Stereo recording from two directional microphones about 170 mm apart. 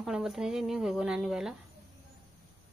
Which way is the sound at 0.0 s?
Centre (ahead or behind).